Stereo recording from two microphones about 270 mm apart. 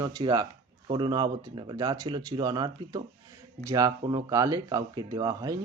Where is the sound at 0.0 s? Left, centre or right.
Centre.